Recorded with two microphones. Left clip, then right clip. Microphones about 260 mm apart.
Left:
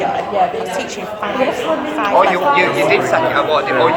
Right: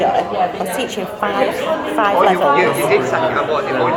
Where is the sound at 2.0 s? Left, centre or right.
Right.